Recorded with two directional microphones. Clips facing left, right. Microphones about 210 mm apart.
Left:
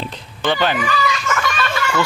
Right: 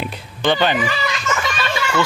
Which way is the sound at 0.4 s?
Centre (ahead or behind).